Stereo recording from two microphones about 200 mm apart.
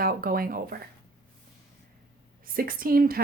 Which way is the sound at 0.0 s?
45° right (ahead or behind).